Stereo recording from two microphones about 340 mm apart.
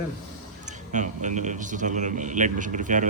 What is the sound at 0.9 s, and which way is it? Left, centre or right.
A man's voice, right.